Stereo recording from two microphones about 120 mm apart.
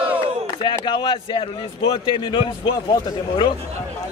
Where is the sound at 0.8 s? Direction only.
40° left (ahead or behind).